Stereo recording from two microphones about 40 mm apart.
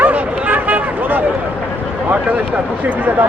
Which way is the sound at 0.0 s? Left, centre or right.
Right.